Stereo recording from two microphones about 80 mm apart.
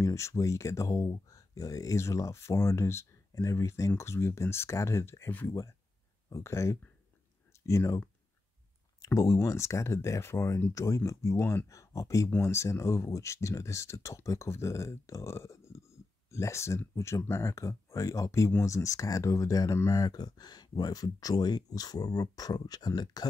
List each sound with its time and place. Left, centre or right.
0.0 s speech: left
6.3 s speech: left
9.0 s speech: left
11.7 s speech: left